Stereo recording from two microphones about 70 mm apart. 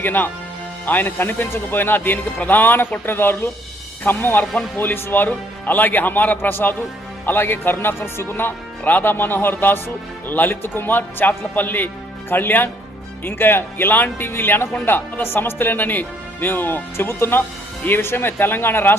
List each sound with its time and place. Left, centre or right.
0.0 s speech: left